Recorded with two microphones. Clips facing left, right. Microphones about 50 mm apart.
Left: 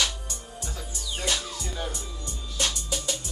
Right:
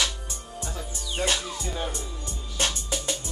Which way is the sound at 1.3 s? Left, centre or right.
Right.